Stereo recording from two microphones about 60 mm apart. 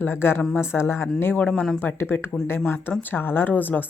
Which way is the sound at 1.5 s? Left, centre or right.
Centre.